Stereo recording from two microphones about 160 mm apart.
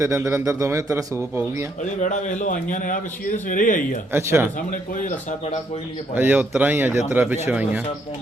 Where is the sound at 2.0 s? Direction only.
50° left (ahead or behind).